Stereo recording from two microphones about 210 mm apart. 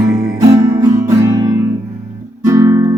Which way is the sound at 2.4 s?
15° right (ahead or behind).